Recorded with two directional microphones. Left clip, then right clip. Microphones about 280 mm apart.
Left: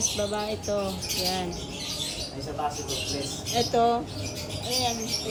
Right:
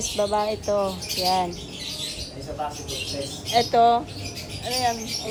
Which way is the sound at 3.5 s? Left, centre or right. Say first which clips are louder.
Right 6 dB; centre.